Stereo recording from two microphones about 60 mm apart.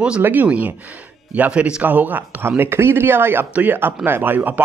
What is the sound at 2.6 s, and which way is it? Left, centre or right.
Speech, right.